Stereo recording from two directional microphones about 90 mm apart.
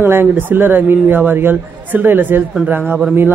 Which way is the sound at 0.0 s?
25° right (ahead or behind).